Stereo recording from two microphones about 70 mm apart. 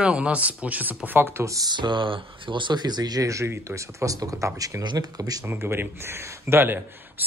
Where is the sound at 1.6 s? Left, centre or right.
Right.